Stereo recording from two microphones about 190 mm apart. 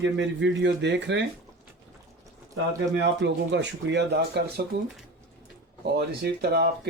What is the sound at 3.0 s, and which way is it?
Speech, 65° right (ahead or behind).